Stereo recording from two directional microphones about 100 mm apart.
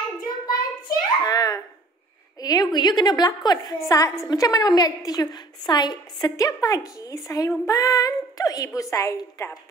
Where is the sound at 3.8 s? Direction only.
35° left (ahead or behind).